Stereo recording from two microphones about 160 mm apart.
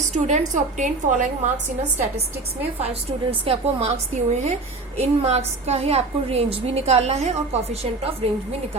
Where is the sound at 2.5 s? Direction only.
40° right (ahead or behind).